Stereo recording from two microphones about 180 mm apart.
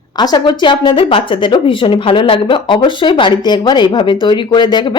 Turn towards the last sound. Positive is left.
turn(degrees=25)  # may be behind; listen again after turning